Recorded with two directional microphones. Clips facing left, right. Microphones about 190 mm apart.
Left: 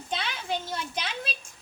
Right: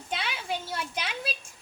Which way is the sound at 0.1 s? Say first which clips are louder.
Left 1 dB; 10° right (ahead or behind).